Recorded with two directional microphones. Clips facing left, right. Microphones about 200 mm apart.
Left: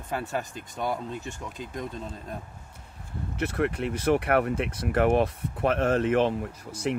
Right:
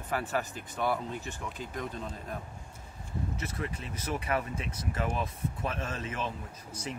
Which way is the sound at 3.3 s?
65° left (ahead or behind).